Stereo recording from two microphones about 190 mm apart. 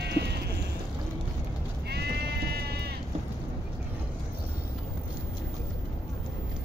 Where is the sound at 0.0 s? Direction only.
60° right (ahead or behind).